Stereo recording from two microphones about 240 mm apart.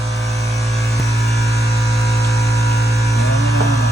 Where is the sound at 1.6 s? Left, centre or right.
Left.